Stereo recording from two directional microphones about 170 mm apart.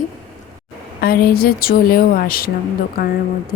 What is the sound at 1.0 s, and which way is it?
A woman's voice, 60° left (ahead or behind).